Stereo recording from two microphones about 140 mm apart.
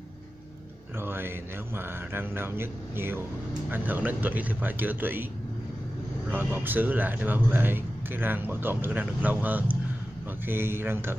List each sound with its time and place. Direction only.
0.9 s mantra: 15° right (ahead or behind)
1.8 s a man's voice: 15° right (ahead or behind)
6.3 s a man's voice: 15° right (ahead or behind)